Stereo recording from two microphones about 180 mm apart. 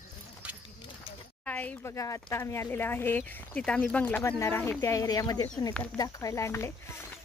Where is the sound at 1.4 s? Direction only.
10° left (ahead or behind).